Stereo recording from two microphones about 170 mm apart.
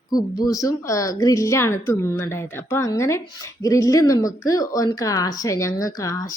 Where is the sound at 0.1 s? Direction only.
25° left (ahead or behind).